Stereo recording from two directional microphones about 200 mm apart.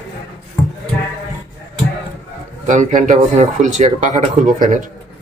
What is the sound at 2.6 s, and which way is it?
Speech, 40° right (ahead or behind).